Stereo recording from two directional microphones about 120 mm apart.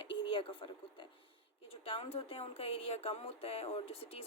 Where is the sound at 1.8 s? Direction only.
55° left (ahead or behind).